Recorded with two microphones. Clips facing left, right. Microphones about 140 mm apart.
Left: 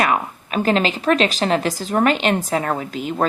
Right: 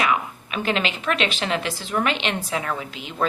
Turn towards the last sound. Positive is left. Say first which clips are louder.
# left 5 dB
turn(degrees=45)  # may be behind; listen again after turning